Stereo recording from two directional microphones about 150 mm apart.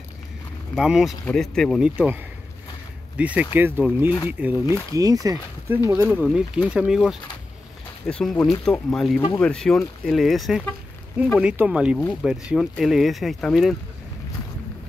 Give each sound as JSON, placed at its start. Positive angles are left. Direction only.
{"t": 0.7, "sound": "speech", "side_deg": -5}
{"t": 2.0, "sound": "speech", "side_deg": -10}
{"t": 4.9, "sound": "speech", "side_deg": -25}
{"t": 12.0, "sound": "speech", "side_deg": 5}